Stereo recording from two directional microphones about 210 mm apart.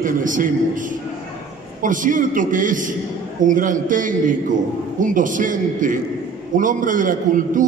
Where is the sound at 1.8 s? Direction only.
40° right (ahead or behind).